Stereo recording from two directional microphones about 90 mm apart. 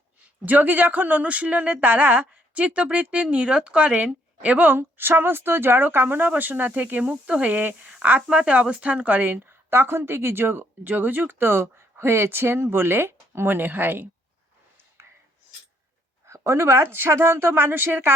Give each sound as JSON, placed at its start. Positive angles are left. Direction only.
{"t": 0.4, "sound": "a woman's voice", "side_deg": -20}
{"t": 16.2, "sound": "a woman's voice", "side_deg": -30}